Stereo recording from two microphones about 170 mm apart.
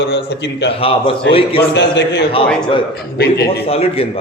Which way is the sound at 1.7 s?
90° left.